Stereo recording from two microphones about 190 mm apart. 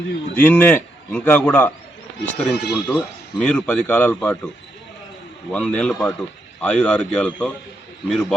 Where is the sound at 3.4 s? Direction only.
10° left (ahead or behind).